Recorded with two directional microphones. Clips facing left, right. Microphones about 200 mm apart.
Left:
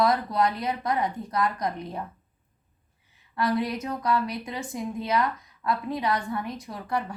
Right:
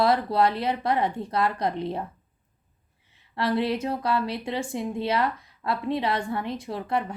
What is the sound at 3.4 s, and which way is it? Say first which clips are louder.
A woman's voice: right 2 dB; 30° right (ahead or behind).